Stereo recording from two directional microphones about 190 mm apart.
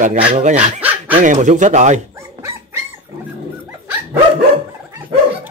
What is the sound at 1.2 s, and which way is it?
Speech, 40° right (ahead or behind).